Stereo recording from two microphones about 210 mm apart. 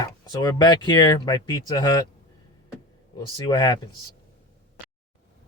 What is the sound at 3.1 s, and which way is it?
Speech, 20° left (ahead or behind).